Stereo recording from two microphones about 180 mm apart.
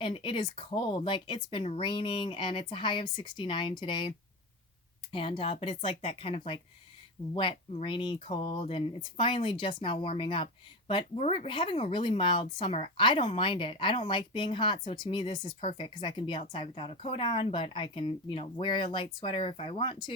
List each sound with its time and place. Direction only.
0.0 s speech: 30° left (ahead or behind)
5.4 s a woman's voice: 30° left (ahead or behind)